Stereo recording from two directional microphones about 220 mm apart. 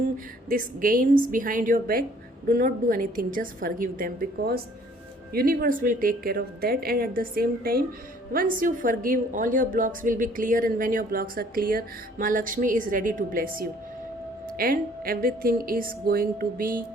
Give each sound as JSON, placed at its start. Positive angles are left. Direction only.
{"t": 0.4, "sound": "a woman's voice", "side_deg": -40}